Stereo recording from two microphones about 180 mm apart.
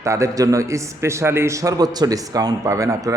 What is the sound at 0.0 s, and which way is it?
A man's voice, 15° right (ahead or behind).